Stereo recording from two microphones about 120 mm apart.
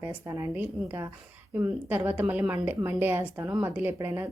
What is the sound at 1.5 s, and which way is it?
A woman's voice, 15° right (ahead or behind).